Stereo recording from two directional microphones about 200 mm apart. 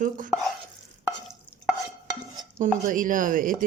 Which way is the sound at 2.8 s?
40° right (ahead or behind).